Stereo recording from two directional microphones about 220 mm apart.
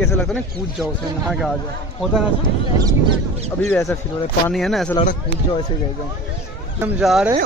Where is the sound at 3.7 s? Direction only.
10° left (ahead or behind).